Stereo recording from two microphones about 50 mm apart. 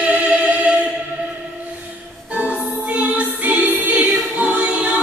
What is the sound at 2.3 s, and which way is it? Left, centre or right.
Choir, right.